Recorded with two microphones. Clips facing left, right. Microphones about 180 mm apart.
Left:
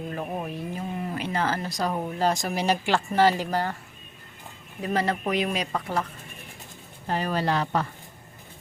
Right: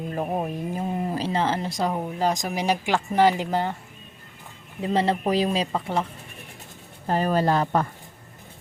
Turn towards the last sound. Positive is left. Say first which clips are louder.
# right 4 dB
turn(degrees=-45)  # may be behind; listen again after turning